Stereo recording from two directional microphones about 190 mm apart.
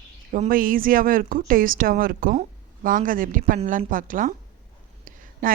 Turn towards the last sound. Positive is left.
turn(degrees=-45)  # may be behind; listen again after turning